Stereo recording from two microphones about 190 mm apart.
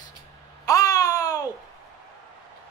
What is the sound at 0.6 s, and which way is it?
Babbling, 20° left (ahead or behind).